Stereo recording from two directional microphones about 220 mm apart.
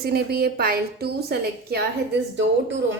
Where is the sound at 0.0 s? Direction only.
45° right (ahead or behind).